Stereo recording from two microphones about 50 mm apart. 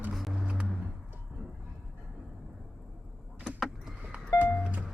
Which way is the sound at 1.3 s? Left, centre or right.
Right.